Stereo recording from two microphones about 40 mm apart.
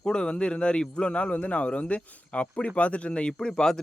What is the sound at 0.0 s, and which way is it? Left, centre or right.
A man's voice, left.